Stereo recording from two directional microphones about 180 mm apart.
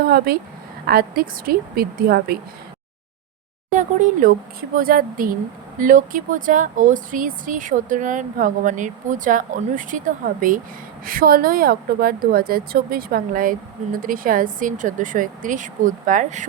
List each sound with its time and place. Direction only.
0.1 s a woman's voice: 60° right (ahead or behind)
3.7 s speech: 45° right (ahead or behind)